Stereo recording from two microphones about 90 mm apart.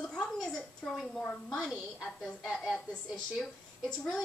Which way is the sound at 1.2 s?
10° left (ahead or behind).